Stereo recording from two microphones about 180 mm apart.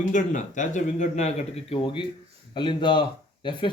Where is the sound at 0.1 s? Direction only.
45° left (ahead or behind).